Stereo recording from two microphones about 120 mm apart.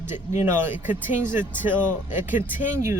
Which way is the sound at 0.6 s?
15° right (ahead or behind).